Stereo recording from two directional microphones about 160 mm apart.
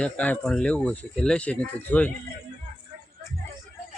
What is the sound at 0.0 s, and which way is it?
Speech, 10° left (ahead or behind).